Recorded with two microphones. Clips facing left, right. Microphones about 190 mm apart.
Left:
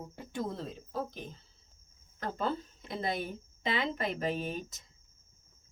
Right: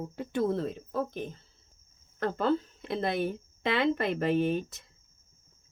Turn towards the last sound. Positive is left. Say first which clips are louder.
# right 9 dB
turn(degrees=-65)  # may be behind; listen again after turning